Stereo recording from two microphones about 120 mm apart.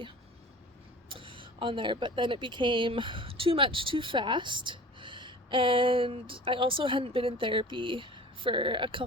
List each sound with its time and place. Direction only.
1.1 s speech: 45° right (ahead or behind)